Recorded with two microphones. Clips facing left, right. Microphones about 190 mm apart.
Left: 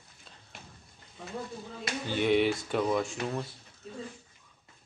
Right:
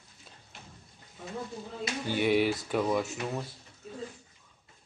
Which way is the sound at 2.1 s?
5° right (ahead or behind).